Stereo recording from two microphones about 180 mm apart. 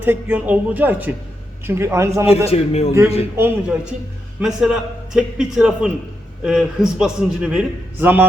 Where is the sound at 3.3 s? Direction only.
10° right (ahead or behind).